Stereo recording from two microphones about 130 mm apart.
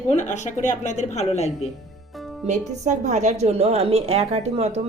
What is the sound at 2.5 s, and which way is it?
A woman's voice, 65° right (ahead or behind).